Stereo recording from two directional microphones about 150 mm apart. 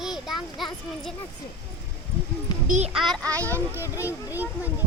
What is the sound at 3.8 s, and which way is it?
Speech, 15° right (ahead or behind).